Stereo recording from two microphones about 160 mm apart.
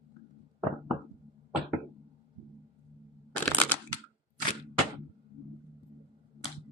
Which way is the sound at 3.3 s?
10° left (ahead or behind).